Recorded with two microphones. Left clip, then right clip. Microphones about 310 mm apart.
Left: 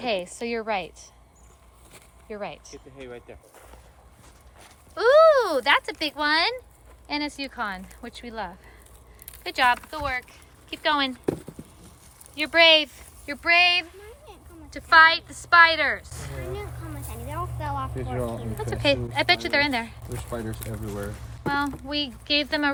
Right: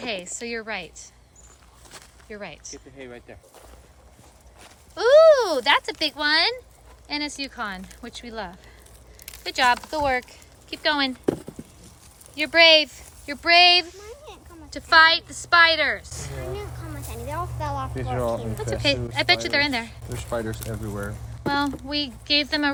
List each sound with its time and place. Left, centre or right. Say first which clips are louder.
0.0 s a woman's voice: left 3 dB; centre
2.3 s a woman's voice: left 2 dB; centre
3.0 s speech: left 2 dB; right
4.9 s a woman's voice: right 2 dB; centre
14.3 s a sound: right 4 dB; centre
18.1 s speech: right 7 dB; right
18.3 s a woman's voice: right 3 dB; centre
20.3 s speech: right 6 dB; centre
21.4 s a woman's voice: right 2 dB; centre